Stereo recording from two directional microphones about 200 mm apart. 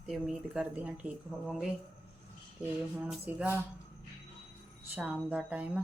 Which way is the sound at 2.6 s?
10° right (ahead or behind).